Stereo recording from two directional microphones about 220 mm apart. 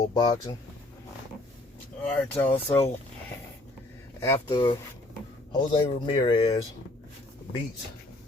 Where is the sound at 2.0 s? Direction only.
5° left (ahead or behind).